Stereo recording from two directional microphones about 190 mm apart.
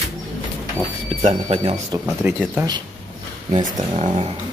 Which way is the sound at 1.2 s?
30° right (ahead or behind).